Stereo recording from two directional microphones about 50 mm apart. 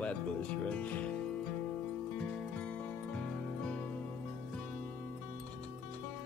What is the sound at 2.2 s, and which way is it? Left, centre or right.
Music, left.